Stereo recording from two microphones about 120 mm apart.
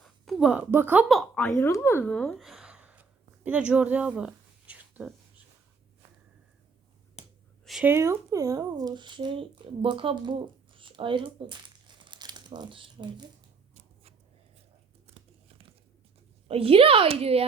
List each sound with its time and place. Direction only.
0.0 s a woman's voice: centre (ahead or behind); by 1.0 s 15° right (ahead or behind)
1.0 s a woman's voice: centre (ahead or behind)
1.4 s speech: 20° left (ahead or behind)
2.0 s speech: 10° left (ahead or behind)
2.4 s a sound: 5° right (ahead or behind)
7.2 s finger snapping: 60° left (ahead or behind)
7.6 s a sound: centre (ahead or behind)
7.9 s speech: 20° right (ahead or behind); by 11.5 s 45° right (ahead or behind)
12.0 s crumpling: 40° right (ahead or behind)
15.0 s tearing: 55° right (ahead or behind)
16.5 s speech: 55° right (ahead or behind)